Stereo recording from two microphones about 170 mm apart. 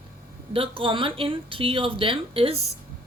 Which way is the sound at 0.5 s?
30° right (ahead or behind).